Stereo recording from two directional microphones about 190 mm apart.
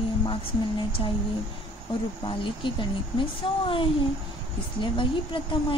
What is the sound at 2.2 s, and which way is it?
A woman's voice, 25° left (ahead or behind).